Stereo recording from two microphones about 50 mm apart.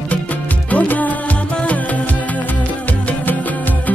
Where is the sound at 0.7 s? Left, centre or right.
Left.